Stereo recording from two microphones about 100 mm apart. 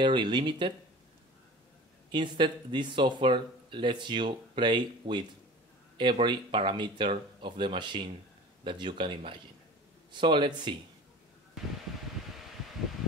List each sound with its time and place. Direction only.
0.0 s speech: 50° right (ahead or behind)
2.0 s speech: 50° right (ahead or behind)